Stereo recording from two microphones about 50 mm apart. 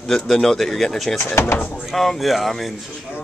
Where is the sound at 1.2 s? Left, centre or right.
Left.